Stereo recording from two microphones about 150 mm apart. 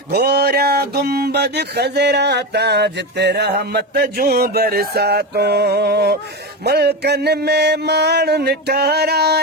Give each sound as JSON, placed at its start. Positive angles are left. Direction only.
{"t": 0.1, "sound": "speech", "side_deg": -90}